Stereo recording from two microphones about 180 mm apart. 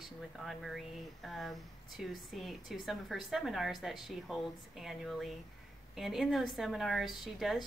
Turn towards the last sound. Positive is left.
turn(degrees=0)  # may be behind; listen again after turning